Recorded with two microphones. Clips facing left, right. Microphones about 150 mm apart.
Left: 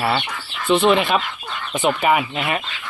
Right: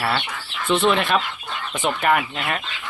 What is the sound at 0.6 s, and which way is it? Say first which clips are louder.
Speech: left 3 dB; centre (ahead or behind).